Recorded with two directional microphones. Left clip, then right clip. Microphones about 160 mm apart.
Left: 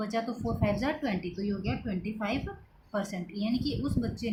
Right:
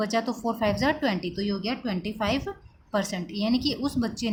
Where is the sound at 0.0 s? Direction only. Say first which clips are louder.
Right 6 dB; 55° right (ahead or behind).